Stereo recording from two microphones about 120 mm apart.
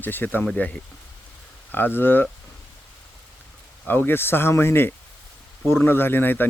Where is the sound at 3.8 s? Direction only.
15° left (ahead or behind).